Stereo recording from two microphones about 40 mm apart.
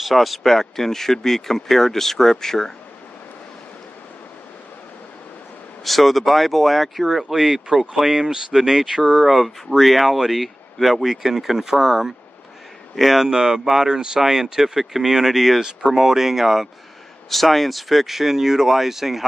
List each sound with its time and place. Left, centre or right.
0.0 s speech: centre
5.9 s speech: centre
9.2 s speech: centre
13.2 s speech: centre
17.3 s speech: centre